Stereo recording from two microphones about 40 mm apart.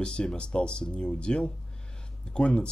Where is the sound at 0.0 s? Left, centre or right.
Left.